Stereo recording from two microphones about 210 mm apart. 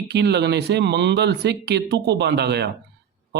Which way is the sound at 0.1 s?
55° right (ahead or behind).